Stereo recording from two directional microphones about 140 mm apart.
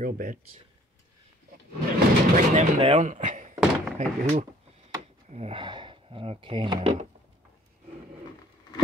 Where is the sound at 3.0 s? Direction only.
60° right (ahead or behind); by 7.0 s 40° right (ahead or behind).